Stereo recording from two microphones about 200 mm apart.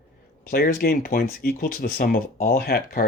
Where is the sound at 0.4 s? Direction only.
50° left (ahead or behind).